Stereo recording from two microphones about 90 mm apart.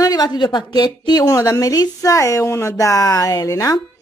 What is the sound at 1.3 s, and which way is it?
A woman's voice, 40° left (ahead or behind).